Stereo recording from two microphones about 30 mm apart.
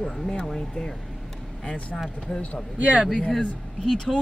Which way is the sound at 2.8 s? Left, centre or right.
Right.